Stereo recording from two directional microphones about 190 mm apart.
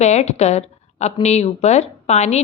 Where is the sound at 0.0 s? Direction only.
35° left (ahead or behind).